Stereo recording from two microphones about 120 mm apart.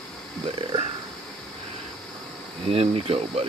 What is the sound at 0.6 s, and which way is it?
Speech, 45° right (ahead or behind).